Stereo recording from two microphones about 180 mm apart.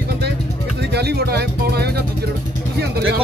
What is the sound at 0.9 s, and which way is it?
Speech, 65° right (ahead or behind).